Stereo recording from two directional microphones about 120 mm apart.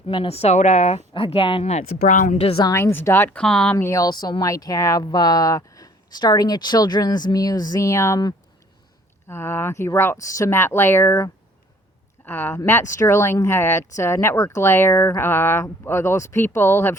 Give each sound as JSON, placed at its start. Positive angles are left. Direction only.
{"t": 0.1, "sound": "speech", "side_deg": 50}
{"t": 1.1, "sound": "speech", "side_deg": 50}
{"t": 1.7, "sound": "speech", "side_deg": 90}
{"t": 2.4, "sound": "speech", "side_deg": 50}
{"t": 2.7, "sound": "speech", "side_deg": 20}
{"t": 3.8, "sound": "speech", "side_deg": 25}